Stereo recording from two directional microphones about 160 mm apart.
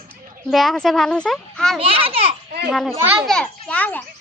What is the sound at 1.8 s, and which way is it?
Speech, 35° right (ahead or behind).